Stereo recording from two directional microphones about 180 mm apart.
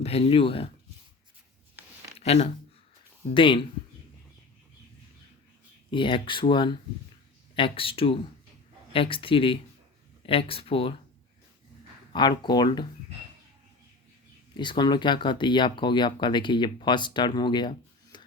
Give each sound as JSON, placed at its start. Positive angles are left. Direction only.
{"t": 0.0, "sound": "speech", "side_deg": 30}
{"t": 2.1, "sound": "a sound", "side_deg": 35}
{"t": 3.3, "sound": "speech", "side_deg": 30}
{"t": 5.9, "sound": "speech", "side_deg": 30}
{"t": 12.1, "sound": "speech", "side_deg": 25}
{"t": 14.5, "sound": "speech", "side_deg": 25}